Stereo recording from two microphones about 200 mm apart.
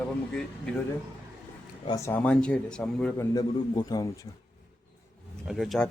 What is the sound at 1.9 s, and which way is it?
Speech, 15° left (ahead or behind).